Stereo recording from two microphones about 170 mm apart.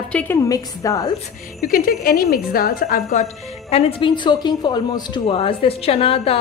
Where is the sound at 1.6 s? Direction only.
60° left (ahead or behind).